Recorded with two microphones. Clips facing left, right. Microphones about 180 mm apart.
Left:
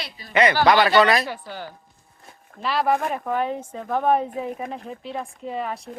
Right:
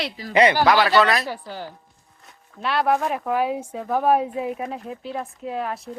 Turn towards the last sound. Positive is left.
turn(degrees=0)  # may be behind; listen again after turning